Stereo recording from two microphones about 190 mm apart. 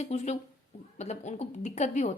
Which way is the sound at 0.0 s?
35° left (ahead or behind).